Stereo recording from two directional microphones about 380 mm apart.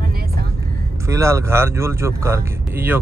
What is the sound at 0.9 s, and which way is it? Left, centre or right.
Speech, centre.